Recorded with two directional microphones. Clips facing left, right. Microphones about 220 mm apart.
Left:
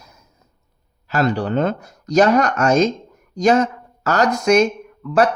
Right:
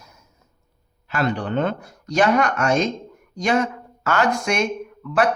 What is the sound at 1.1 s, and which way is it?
Speech, 40° left (ahead or behind).